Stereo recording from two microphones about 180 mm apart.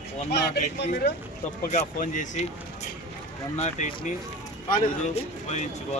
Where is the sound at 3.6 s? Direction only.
40° left (ahead or behind).